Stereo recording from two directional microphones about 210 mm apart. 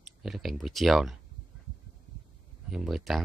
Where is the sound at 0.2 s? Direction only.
Centre (ahead or behind).